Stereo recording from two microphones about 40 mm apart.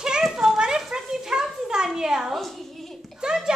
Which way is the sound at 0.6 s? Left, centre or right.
Centre.